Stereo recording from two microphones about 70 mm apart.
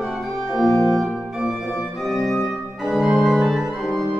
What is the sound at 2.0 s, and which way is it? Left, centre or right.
Organ, centre.